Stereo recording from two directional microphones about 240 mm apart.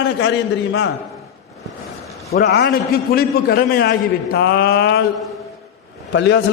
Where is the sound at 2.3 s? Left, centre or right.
Left.